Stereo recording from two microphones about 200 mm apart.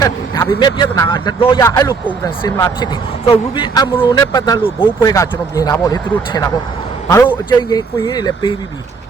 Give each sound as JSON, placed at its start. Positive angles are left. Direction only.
{"t": 0.0, "sound": "a woman's voice", "side_deg": 20}